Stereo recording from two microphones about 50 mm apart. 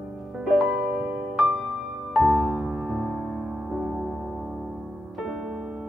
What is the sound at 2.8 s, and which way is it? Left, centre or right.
Music, centre.